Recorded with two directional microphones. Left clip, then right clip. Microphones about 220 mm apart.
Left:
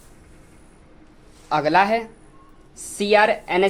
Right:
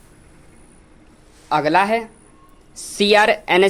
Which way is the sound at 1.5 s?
15° right (ahead or behind).